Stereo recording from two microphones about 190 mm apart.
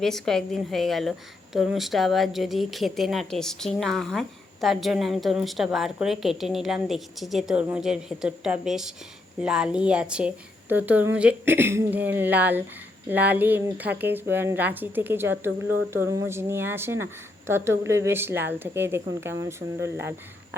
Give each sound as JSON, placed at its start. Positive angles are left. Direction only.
{"t": 0.0, "sound": "a woman's voice", "side_deg": 0}